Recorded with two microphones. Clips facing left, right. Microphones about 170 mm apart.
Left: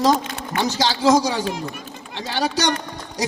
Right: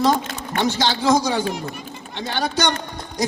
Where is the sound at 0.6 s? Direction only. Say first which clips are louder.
Left 1 dB; 35° left (ahead or behind).